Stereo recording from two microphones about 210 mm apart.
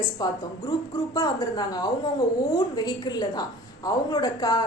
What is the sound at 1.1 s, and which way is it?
A woman's voice, 15° left (ahead or behind).